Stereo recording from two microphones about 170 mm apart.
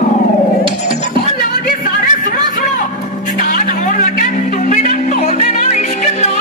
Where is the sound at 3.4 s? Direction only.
50° left (ahead or behind).